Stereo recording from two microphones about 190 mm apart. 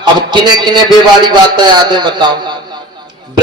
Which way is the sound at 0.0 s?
25° right (ahead or behind).